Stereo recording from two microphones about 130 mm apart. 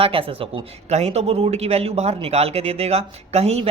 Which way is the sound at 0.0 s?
45° right (ahead or behind).